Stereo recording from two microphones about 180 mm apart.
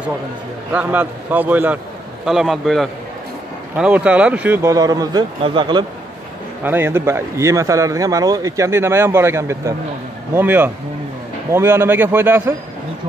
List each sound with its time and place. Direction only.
0.7 s a man's voice: 10° right (ahead or behind); by 5.9 s 25° right (ahead or behind)
6.6 s speech: 10° right (ahead or behind)